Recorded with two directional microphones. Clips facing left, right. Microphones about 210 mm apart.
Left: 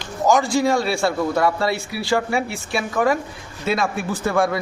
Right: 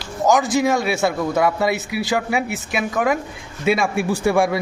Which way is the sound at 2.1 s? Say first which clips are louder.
Left 1 dB; 5° right (ahead or behind).